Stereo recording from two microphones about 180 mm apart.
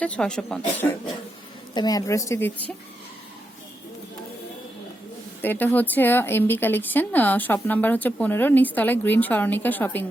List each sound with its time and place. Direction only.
0.0 s speech: 5° left (ahead or behind)
1.7 s speech: 20° left (ahead or behind)
5.4 s speech: 10° left (ahead or behind)